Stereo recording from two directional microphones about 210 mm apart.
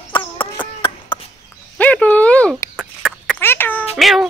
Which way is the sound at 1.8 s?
5° left (ahead or behind).